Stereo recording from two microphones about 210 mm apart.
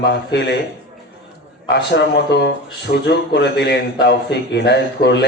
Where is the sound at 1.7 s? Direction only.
50° left (ahead or behind).